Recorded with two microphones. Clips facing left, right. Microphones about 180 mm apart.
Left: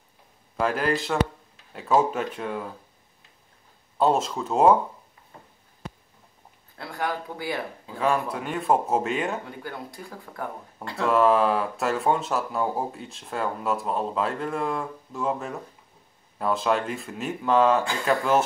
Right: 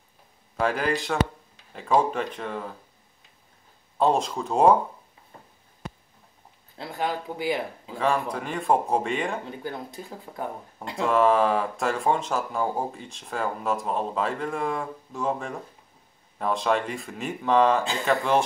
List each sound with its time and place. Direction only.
0.6 s speech: centre (ahead or behind)
4.0 s speech: 5° left (ahead or behind)
6.8 s speech: 20° right (ahead or behind)
8.0 s speech: 5° left (ahead or behind)
9.6 s speech: 20° right (ahead or behind)
11.1 s speech: centre (ahead or behind)